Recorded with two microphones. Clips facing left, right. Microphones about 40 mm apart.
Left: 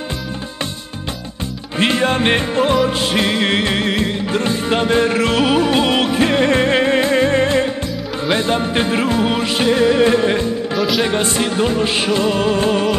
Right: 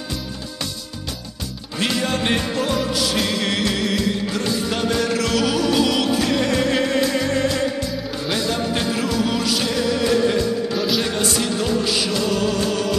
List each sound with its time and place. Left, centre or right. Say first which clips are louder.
1.8 s music: left 6 dB; left